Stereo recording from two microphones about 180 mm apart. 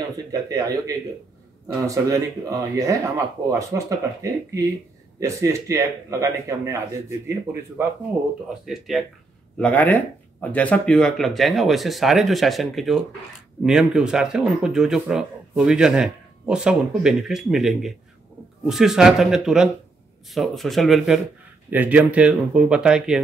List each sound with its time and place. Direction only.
0.3 s a man's voice: 20° right (ahead or behind)
8.6 s speech: centre (ahead or behind)